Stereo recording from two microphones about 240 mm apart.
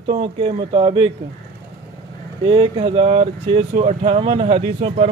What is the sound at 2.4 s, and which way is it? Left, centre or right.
Speech, right.